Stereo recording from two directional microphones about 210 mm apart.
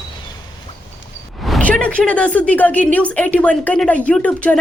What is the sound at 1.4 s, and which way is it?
A woman's voice, 5° left (ahead or behind).